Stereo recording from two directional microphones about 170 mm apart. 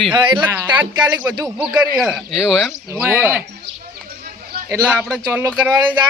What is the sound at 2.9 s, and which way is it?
Speech, 15° right (ahead or behind).